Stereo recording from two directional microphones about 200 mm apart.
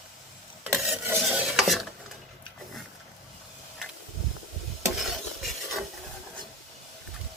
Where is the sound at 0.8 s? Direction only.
10° right (ahead or behind).